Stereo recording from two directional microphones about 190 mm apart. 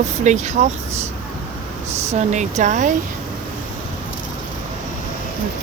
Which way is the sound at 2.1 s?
40° right (ahead or behind).